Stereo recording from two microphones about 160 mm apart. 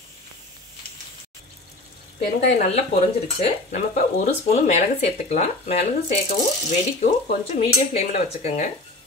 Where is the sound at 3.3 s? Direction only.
50° left (ahead or behind).